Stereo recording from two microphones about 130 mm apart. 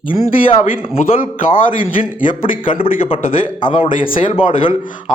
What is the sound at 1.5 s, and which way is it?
A man's voice, 45° left (ahead or behind).